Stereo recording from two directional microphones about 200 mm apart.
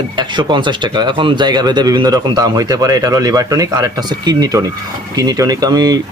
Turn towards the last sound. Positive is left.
turn(degrees=-20)  # may be behind; listen again after turning